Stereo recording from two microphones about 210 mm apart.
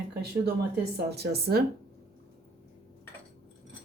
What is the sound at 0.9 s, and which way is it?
Speech, 50° right (ahead or behind).